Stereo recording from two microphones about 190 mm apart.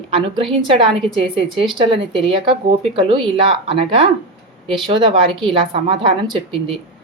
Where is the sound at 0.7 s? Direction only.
25° right (ahead or behind).